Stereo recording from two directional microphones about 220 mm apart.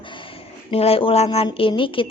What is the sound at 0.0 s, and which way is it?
A woman's voice, 20° left (ahead or behind).